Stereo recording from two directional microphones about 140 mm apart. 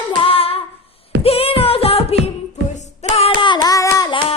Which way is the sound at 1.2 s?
45° left (ahead or behind).